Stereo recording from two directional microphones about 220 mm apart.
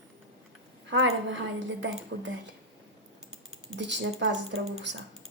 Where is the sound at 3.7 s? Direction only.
55° right (ahead or behind).